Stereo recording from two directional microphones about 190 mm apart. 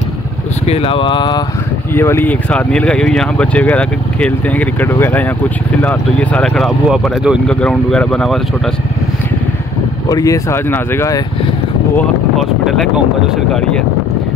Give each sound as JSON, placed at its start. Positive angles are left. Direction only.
{"t": 0.7, "sound": "speech", "side_deg": 30}
{"t": 2.0, "sound": "speech", "side_deg": 10}
{"t": 10.0, "sound": "speech", "side_deg": 20}